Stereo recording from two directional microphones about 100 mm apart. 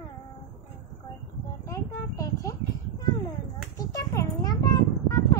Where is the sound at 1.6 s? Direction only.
35° left (ahead or behind).